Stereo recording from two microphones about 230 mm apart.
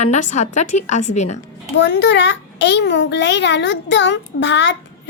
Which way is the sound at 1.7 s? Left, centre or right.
Left.